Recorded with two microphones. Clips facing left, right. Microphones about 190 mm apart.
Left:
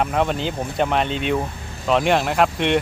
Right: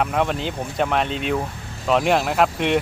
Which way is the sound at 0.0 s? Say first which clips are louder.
Left 1 dB; centre (ahead or behind).